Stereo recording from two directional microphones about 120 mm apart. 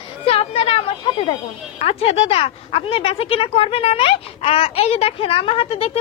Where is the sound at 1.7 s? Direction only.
60° left (ahead or behind).